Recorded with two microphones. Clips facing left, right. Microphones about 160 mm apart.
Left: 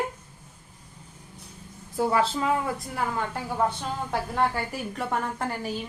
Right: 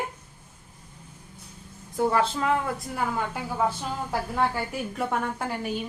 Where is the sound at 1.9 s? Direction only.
5° left (ahead or behind).